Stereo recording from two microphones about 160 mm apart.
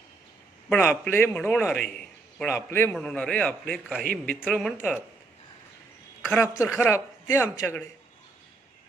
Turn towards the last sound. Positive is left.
turn(degrees=15)  # may be behind; listen again after turning